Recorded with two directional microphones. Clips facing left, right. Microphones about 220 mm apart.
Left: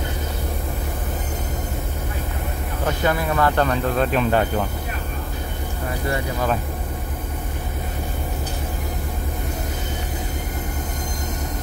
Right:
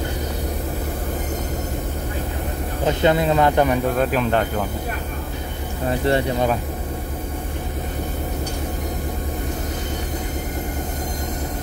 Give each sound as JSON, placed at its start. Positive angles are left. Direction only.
{"t": 2.8, "sound": "speech", "side_deg": -20}
{"t": 5.9, "sound": "speech", "side_deg": -30}